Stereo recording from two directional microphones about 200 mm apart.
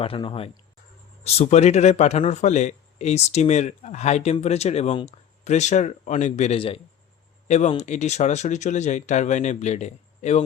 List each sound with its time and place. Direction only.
0.0 s a man's voice: 30° left (ahead or behind)